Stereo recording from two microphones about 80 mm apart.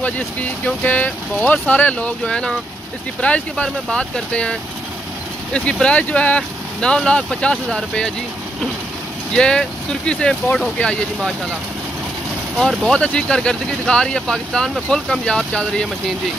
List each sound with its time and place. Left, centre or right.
0.0 s speech: centre
9.3 s speech: centre
12.8 s speech: centre